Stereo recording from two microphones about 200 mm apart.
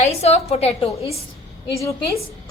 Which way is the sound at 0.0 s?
30° left (ahead or behind).